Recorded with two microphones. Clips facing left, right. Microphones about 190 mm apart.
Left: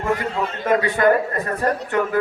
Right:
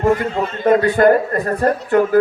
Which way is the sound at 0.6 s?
35° right (ahead or behind).